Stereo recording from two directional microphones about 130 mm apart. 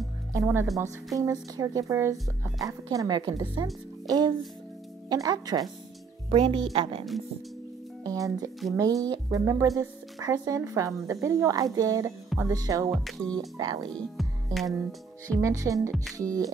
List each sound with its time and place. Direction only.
0.3 s a woman's voice: 20° right (ahead or behind)
4.1 s music: 30° right (ahead or behind)
5.1 s speech: 30° right (ahead or behind)
6.3 s speech: 45° right (ahead or behind)
8.0 s speech: 30° right (ahead or behind)
12.9 s music: 5° left (ahead or behind)
15.4 s speech: 25° right (ahead or behind)